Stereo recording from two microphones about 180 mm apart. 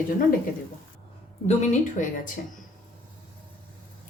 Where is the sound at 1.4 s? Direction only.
40° left (ahead or behind).